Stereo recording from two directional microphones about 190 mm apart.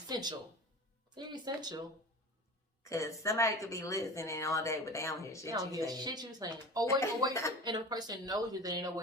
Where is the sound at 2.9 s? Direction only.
15° left (ahead or behind).